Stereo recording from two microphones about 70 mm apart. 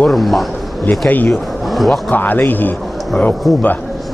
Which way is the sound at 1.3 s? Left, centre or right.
Centre.